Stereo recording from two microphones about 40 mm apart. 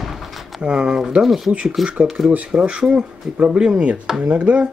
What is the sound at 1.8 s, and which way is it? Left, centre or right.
Speech, right.